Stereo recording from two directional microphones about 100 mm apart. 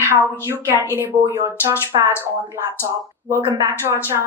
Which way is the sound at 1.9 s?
60° right (ahead or behind).